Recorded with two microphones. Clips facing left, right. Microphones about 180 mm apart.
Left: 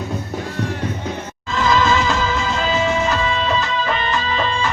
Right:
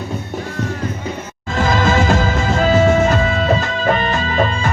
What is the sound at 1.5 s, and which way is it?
Music, 50° right (ahead or behind).